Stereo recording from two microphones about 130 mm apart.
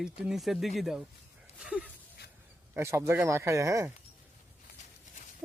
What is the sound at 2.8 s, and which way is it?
Speech, 20° right (ahead or behind).